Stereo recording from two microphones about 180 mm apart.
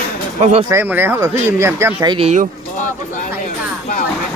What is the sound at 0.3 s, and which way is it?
Speech, 35° right (ahead or behind).